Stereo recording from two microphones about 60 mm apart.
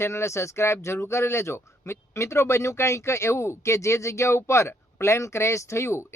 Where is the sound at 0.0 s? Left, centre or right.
Left.